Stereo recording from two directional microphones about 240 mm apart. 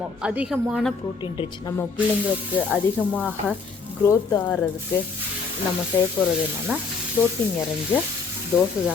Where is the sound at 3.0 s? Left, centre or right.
Centre.